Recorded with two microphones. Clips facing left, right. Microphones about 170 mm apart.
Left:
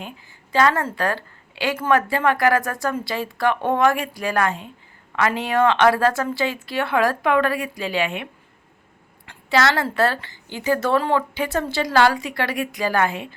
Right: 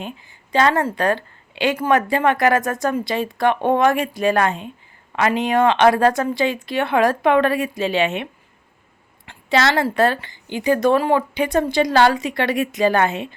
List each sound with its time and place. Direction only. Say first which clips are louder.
0.0 s a woman's voice: right 4 dB; 20° right (ahead or behind)